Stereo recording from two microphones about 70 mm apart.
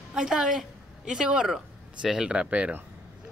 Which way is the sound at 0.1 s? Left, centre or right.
Centre.